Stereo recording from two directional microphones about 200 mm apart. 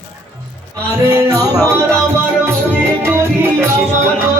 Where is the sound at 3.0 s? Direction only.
10° right (ahead or behind).